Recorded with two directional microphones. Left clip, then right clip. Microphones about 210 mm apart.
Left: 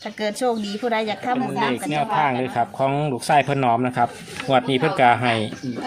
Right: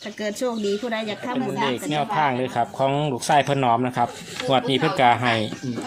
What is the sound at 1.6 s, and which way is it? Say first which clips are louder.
Speech: left 1 dB; centre (ahead or behind).